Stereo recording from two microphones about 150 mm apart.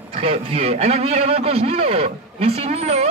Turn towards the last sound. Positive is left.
turn(degrees=-45)  # may be behind; listen again after turning